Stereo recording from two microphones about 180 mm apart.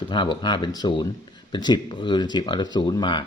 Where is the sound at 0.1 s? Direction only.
25° left (ahead or behind).